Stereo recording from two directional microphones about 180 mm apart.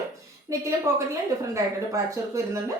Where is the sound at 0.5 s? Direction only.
20° right (ahead or behind).